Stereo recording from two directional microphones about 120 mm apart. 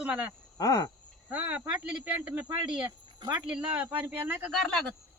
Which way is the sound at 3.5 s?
10° right (ahead or behind).